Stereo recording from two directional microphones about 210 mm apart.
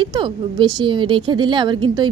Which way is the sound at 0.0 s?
25° right (ahead or behind).